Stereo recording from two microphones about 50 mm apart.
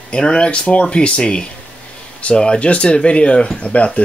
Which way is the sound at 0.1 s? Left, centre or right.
Centre.